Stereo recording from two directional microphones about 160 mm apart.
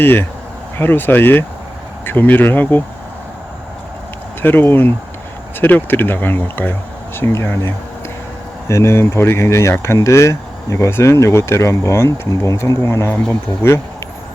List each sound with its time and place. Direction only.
0.0 s speech: 15° left (ahead or behind)
4.4 s speech: 15° left (ahead or behind)
8.7 s speech: 15° left (ahead or behind)